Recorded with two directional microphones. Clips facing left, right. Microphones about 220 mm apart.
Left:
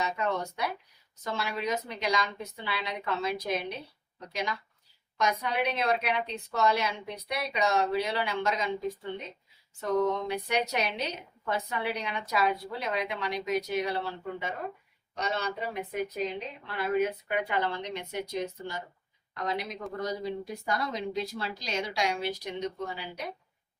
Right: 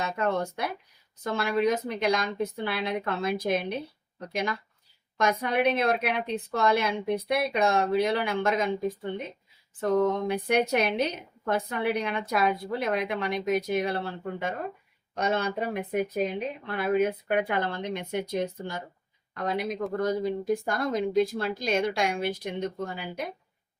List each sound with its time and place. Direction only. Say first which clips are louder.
0.0 s a woman's voice: right 3 dB; 55° right (ahead or behind)
9.8 s a woman's voice: right 3 dB; 55° right (ahead or behind)